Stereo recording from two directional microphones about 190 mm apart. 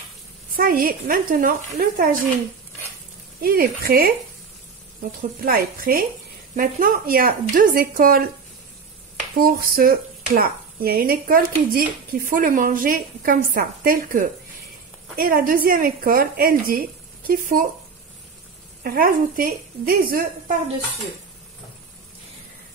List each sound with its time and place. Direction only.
0.6 s speech: 50° right (ahead or behind)
3.4 s speech: 50° right (ahead or behind)
5.4 s speech: 50° right (ahead or behind)
9.4 s speech: 50° right (ahead or behind)
18.8 s speech: 50° right (ahead or behind)